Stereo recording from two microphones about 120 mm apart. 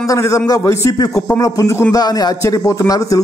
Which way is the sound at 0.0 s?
25° left (ahead or behind).